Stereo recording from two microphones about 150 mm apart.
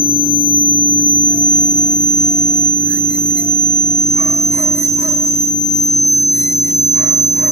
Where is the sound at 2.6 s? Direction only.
15° right (ahead or behind).